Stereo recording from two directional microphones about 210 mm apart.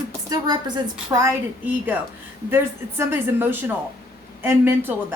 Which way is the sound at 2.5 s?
10° right (ahead or behind).